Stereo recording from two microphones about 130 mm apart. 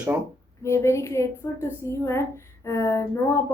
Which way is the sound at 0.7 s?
20° left (ahead or behind).